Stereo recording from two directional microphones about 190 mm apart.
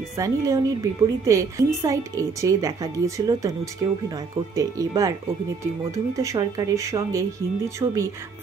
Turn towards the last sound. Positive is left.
turn(degrees=-15)  # may be behind; listen again after turning